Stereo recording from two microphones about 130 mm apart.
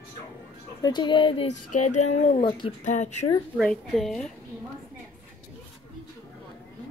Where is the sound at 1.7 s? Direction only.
65° left (ahead or behind).